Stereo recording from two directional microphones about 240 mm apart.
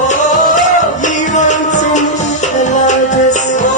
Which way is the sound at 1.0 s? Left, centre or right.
Left.